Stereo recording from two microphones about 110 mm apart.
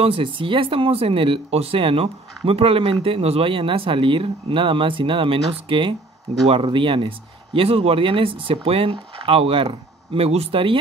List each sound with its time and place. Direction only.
0.0 s speech: 55° right (ahead or behind)